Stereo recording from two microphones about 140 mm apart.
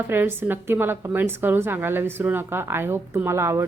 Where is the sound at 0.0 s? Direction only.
15° right (ahead or behind).